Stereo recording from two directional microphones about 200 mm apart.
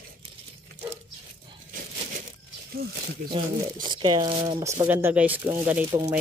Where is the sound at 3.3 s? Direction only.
25° right (ahead or behind).